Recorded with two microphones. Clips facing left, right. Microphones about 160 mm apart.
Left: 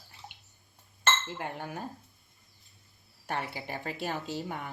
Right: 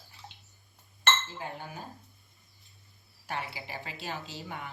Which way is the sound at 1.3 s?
65° left (ahead or behind).